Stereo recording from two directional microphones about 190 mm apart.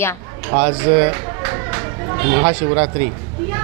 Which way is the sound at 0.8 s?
15° right (ahead or behind).